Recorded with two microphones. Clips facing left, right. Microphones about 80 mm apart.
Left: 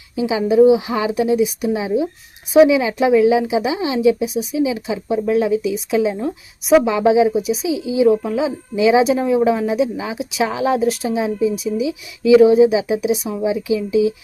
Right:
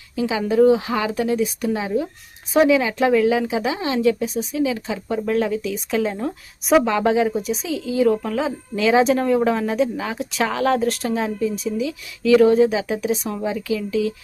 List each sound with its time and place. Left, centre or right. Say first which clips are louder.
0.2 s a woman's voice: left 4 dB; centre